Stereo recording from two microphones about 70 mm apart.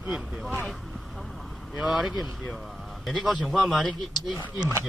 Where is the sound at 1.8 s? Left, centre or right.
Centre.